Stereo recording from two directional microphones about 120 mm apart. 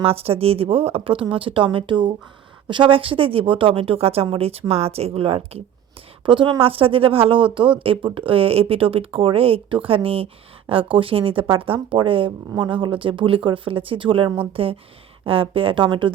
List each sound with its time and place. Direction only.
0.0 s a woman's voice: 55° right (ahead or behind)
6.2 s speech: 45° right (ahead or behind)